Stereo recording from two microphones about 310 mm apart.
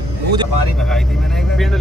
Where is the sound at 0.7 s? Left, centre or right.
Centre.